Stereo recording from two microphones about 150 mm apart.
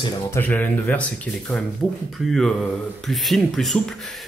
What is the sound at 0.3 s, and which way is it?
Speech, 10° left (ahead or behind).